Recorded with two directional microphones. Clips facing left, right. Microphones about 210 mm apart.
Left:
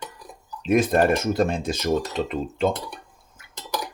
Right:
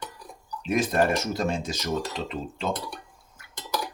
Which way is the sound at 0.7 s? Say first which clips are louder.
Left 5 dB; 50° left (ahead or behind).